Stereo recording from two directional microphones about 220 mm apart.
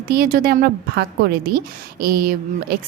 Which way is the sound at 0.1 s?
45° right (ahead or behind).